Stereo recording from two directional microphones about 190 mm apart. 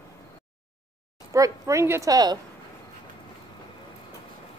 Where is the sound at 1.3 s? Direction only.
15° right (ahead or behind).